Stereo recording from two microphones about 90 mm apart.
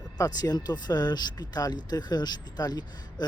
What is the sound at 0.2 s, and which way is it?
A man's voice, 45° left (ahead or behind).